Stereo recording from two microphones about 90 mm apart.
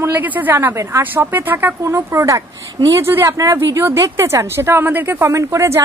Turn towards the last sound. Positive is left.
turn(degrees=-35)  # may be behind; listen again after turning